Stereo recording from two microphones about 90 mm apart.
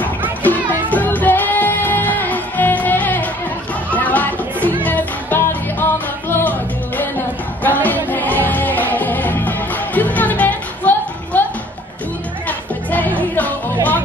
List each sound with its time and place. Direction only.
0.4 s speech: 20° left (ahead or behind)
0.8 s music: 20° left (ahead or behind)
7.6 s music: 20° left (ahead or behind)
12.4 s music: 20° left (ahead or behind)